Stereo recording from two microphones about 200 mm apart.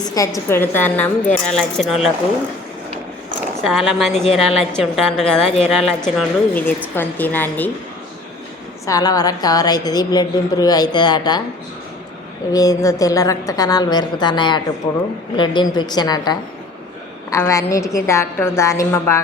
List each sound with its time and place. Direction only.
0.0 s speech: 20° left (ahead or behind); by 2.1 s centre (ahead or behind)
3.6 s a woman's voice: centre (ahead or behind)
8.9 s a woman's voice: 20° left (ahead or behind)
12.5 s speech: 15° left (ahead or behind)
15.7 s a woman's voice: 20° left (ahead or behind)